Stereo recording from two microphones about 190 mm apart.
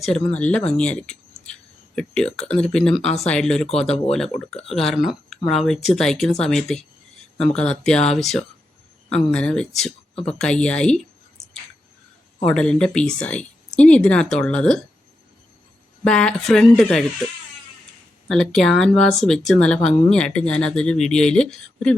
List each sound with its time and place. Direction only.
0.0 s speech: 5° left (ahead or behind)
3.7 s speech: 35° left (ahead or behind)
4.5 s speech: centre (ahead or behind)
12.5 s speech: 5° left (ahead or behind)
16.0 s speech: 5° left (ahead or behind)
18.3 s speech: centre (ahead or behind)